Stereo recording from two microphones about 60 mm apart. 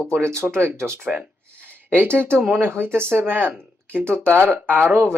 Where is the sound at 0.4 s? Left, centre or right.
Right.